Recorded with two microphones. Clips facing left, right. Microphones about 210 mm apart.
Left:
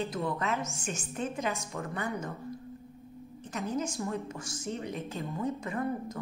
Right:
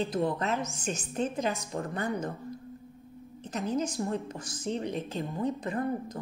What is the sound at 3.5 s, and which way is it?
A woman's voice, 35° right (ahead or behind).